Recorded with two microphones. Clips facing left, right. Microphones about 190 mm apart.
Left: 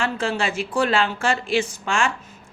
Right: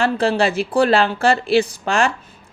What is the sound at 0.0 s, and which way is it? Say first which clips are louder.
A woman's voice: right 7 dB; 35° right (ahead or behind).